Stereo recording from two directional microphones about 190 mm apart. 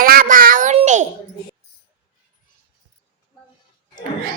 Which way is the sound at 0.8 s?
40° right (ahead or behind).